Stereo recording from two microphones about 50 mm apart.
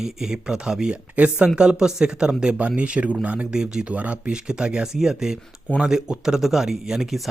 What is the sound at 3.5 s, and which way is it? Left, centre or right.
Speech, centre.